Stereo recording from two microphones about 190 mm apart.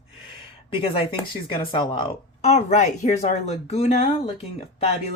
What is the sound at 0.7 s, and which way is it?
Speech, 30° left (ahead or behind).